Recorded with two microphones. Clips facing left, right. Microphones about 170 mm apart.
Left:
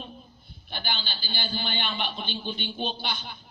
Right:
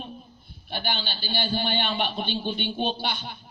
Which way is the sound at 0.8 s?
55° right (ahead or behind).